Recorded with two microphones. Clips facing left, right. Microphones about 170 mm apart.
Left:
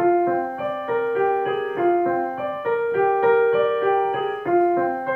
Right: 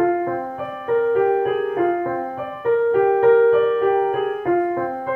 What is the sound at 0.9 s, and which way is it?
Music, 40° right (ahead or behind).